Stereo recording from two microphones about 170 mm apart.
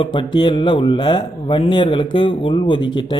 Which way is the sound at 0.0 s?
30° left (ahead or behind).